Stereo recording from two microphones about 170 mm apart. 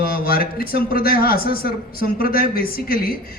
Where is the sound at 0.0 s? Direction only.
60° left (ahead or behind).